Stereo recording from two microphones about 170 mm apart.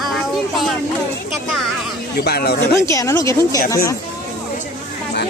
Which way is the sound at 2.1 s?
70° left (ahead or behind).